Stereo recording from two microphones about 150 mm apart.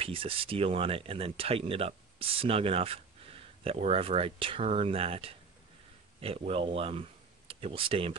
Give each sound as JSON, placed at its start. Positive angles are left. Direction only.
{"t": 0.0, "sound": "speech", "side_deg": -40}